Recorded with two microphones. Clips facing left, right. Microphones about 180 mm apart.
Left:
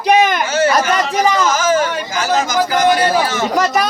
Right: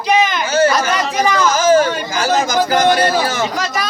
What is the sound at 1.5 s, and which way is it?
Speech, 35° right (ahead or behind).